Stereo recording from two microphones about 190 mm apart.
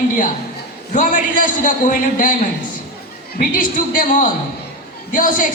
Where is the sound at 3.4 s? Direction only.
45° left (ahead or behind).